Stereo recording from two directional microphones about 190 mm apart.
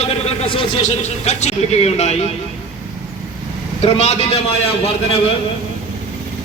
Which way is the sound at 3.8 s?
30° left (ahead or behind).